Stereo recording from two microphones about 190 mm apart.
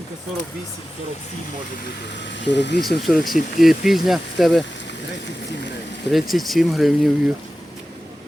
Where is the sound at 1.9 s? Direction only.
65° left (ahead or behind).